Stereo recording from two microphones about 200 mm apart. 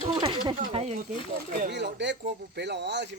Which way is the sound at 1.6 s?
55° right (ahead or behind).